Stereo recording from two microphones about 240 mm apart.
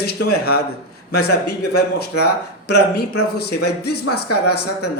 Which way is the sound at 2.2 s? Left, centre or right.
Left.